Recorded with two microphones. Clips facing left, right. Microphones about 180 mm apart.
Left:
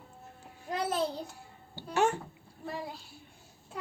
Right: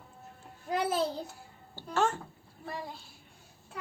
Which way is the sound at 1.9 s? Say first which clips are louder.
Left 2 dB; 15° left (ahead or behind).